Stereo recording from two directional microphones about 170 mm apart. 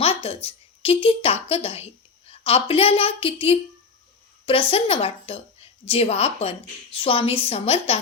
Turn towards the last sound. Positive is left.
turn(degrees=35)  # may be behind; listen again after turning